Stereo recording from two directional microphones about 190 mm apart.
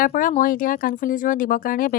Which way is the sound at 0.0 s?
45° left (ahead or behind).